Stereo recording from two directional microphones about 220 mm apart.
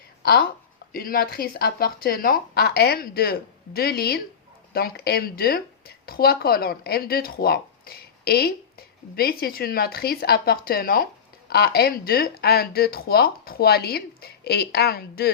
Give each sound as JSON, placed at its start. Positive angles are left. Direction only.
{"t": 0.2, "sound": "speech", "side_deg": 45}